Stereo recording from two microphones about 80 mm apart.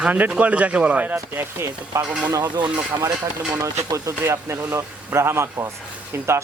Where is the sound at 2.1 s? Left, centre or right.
Centre.